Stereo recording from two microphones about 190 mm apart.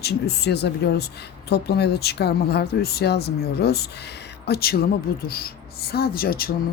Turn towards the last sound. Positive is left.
turn(degrees=50)  # may be behind; listen again after turning